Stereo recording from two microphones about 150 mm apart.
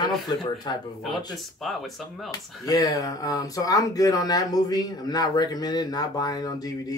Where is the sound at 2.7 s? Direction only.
25° left (ahead or behind).